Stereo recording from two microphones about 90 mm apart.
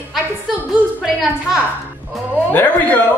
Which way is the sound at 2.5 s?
20° left (ahead or behind).